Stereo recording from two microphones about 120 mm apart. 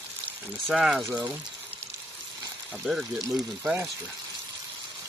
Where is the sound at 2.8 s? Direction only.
5° right (ahead or behind).